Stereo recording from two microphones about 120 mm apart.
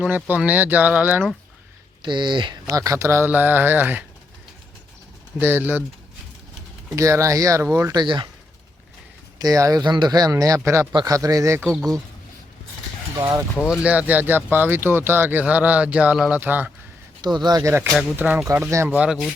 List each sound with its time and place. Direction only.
0.0 s speech: 15° right (ahead or behind)
2.0 s speech: 40° right (ahead or behind)
2.6 s speech: 30° right (ahead or behind)
3.2 s speech: 15° right (ahead or behind)
5.4 s speech: 15° right (ahead or behind)
6.9 s speech: 25° right (ahead or behind)
7.9 s speech: 40° right (ahead or behind)
9.4 s speech: 30° right (ahead or behind)
11.8 s speech: centre (ahead or behind)
13.1 s speech: 30° right (ahead or behind)
13.6 s speech: 10° right (ahead or behind)
17.2 s speech: 35° right (ahead or behind)
17.6 s speech: 20° right (ahead or behind)
18.9 s speech: 5° right (ahead or behind)